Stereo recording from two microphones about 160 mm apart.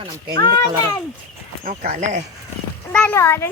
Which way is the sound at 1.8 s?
45° right (ahead or behind).